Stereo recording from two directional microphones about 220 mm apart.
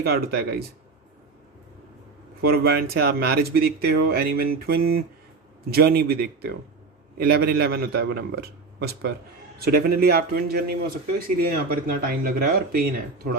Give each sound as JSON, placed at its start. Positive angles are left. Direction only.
{"t": 0.0, "sound": "speech", "side_deg": -45}
{"t": 2.4, "sound": "speech", "side_deg": -45}